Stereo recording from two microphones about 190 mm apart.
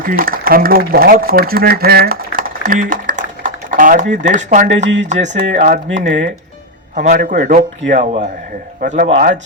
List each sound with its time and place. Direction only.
0.0 s a man's voice: 50° right (ahead or behind)
5.9 s speech: 75° right (ahead or behind)
6.9 s a man's voice: 40° right (ahead or behind)